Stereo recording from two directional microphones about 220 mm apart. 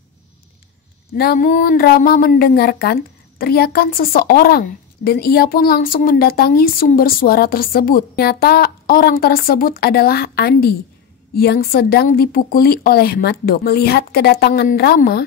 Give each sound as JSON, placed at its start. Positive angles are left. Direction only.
{"t": 1.1, "sound": "speech", "side_deg": 45}